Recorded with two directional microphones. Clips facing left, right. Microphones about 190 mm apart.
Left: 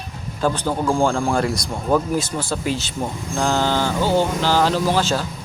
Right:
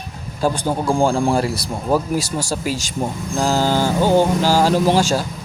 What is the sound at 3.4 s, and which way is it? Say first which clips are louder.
Vehicle: right 2 dB; 35° right (ahead or behind).